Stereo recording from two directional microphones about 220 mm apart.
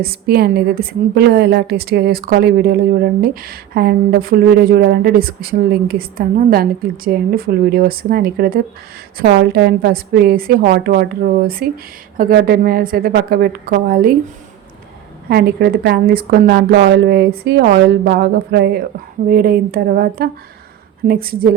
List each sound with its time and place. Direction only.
0.0 s a woman's voice: 45° right (ahead or behind)
15.3 s a woman's voice: 45° right (ahead or behind)